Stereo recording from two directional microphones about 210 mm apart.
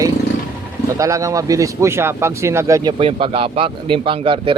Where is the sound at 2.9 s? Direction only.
25° right (ahead or behind).